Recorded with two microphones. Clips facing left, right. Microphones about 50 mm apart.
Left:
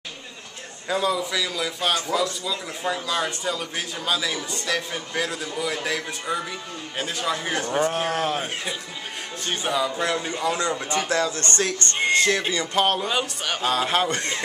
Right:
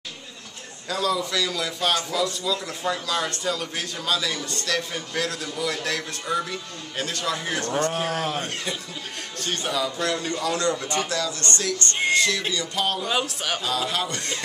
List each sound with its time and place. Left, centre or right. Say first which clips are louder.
0.8 s speech: left 1 dB; centre
1.3 s a man's voice: even; centre; by 13.1 s left
13.1 s speech: even; centre
13.6 s speech: left 6 dB; left